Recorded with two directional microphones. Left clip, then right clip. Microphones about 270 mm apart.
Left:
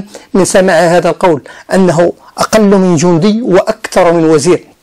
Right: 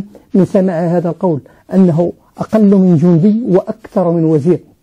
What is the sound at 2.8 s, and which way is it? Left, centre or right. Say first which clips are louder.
Speech: left 4 dB; left.